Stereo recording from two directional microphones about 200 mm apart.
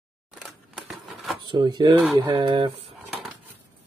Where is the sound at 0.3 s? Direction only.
Centre (ahead or behind).